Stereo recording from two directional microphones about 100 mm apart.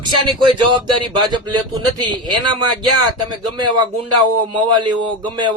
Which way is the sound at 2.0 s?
50° right (ahead or behind).